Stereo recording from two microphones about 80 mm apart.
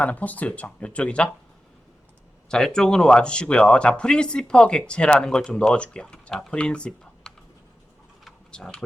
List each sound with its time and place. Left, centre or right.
0.0 s speech: centre
2.5 s speech: centre
8.5 s speech: centre